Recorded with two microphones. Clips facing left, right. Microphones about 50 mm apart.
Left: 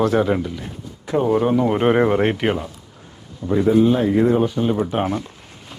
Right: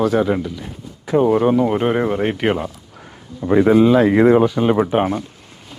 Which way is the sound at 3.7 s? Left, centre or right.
Right.